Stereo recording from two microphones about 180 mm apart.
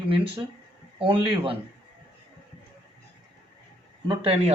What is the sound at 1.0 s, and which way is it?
Speech, 30° right (ahead or behind).